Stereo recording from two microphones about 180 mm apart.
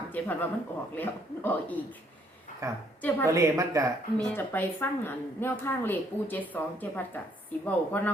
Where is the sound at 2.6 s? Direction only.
15° right (ahead or behind).